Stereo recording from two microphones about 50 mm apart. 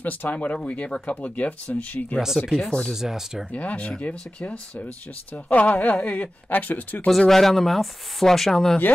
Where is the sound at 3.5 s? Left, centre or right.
Left.